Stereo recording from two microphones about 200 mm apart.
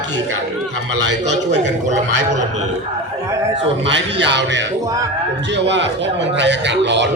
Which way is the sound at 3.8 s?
65° right (ahead or behind).